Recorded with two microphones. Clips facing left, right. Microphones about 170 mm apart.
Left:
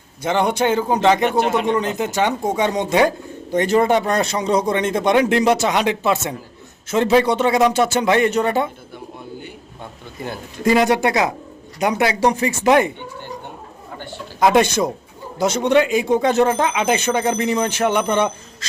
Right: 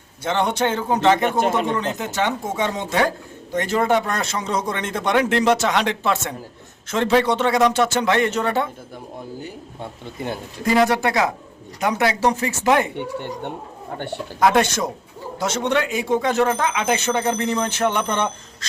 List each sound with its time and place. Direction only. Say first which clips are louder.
0.2 s a man's voice: left 3 dB; 10° left (ahead or behind)
1.4 s speech: left 2 dB; 45° right (ahead or behind)
1.8 s a man's voice: left 3 dB; 15° left (ahead or behind)
10.8 s a man's voice: even; 20° left (ahead or behind)
13.0 s speech: right 5 dB; 70° right (ahead or behind)
14.3 s a man's voice: left 3 dB; 15° left (ahead or behind)